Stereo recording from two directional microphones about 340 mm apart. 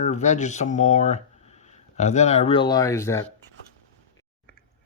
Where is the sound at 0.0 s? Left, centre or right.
Centre.